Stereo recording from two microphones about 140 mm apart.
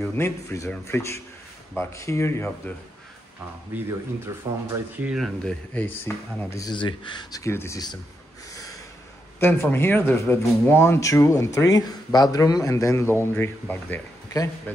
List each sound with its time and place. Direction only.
0.1 s speech: 20° left (ahead or behind)
3.7 s speech: 10° right (ahead or behind)
4.4 s speech: 25° right (ahead or behind)
5.0 s speech: 5° right (ahead or behind)
5.4 s speech: 10° left (ahead or behind); by 7.4 s 35° left (ahead or behind)
7.4 s speech: 20° left (ahead or behind)
9.4 s speech: 15° left (ahead or behind)
14.3 s speech: 25° left (ahead or behind)